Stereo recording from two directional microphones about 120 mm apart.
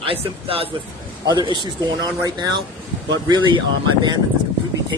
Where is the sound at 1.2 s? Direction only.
35° right (ahead or behind).